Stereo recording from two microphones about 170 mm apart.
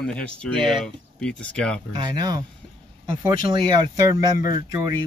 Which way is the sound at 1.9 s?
25° right (ahead or behind).